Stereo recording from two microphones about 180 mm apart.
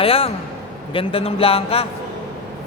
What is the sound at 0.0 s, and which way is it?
A man's voice, 30° left (ahead or behind).